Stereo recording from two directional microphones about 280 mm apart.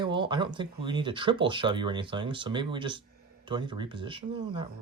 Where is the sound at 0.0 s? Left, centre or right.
Centre.